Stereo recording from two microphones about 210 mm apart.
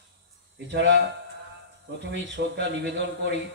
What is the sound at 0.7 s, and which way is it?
A man's voice, 55° right (ahead or behind).